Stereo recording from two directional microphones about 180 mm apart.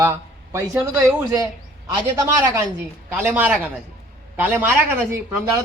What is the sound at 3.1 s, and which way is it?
Speech, 10° right (ahead or behind).